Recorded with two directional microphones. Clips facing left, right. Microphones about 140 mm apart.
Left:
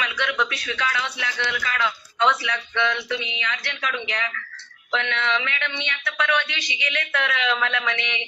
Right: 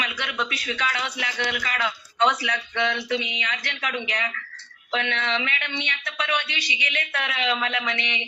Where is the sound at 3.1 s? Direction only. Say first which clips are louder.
Right 1 dB; 15° right (ahead or behind).